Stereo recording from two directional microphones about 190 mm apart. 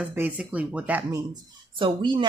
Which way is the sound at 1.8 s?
25° right (ahead or behind).